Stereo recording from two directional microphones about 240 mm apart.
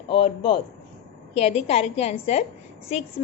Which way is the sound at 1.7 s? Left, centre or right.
Left.